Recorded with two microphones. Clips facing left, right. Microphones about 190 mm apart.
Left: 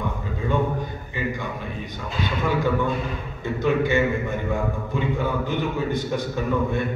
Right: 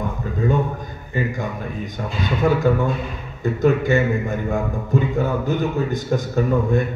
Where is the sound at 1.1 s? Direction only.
45° right (ahead or behind).